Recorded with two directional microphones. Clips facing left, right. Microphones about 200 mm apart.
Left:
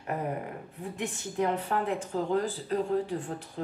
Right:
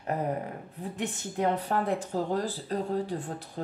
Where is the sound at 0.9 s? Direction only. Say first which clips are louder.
Left 1 dB; 35° right (ahead or behind).